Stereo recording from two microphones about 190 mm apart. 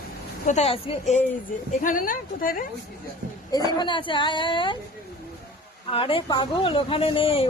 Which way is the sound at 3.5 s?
20° left (ahead or behind).